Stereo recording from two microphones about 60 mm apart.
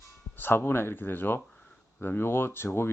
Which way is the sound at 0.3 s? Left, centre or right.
Left.